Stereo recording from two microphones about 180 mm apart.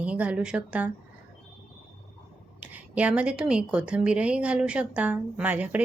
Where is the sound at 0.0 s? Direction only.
5° right (ahead or behind).